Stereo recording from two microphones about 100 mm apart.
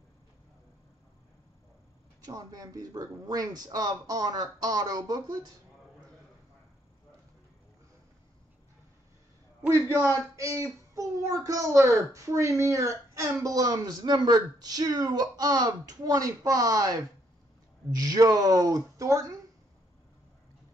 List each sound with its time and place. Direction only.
2.2 s speech: 40° right (ahead or behind)
10.3 s speech: 30° right (ahead or behind)